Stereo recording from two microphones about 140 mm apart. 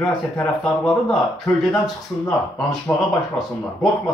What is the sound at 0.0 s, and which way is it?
Speech, centre (ahead or behind).